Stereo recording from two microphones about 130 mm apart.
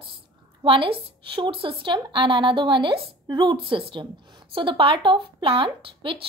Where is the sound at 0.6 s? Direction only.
40° right (ahead or behind).